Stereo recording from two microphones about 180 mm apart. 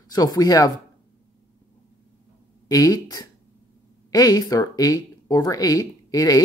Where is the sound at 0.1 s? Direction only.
20° left (ahead or behind).